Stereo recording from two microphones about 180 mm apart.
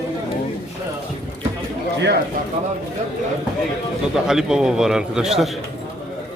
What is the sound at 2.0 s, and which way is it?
Speech, 65° right (ahead or behind).